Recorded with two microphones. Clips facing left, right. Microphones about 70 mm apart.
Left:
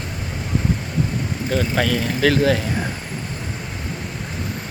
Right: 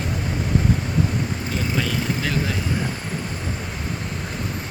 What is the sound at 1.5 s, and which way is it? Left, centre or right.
Speech, left.